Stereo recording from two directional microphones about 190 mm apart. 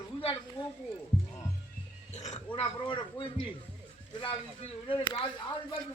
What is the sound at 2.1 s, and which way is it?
Speech, 35° left (ahead or behind).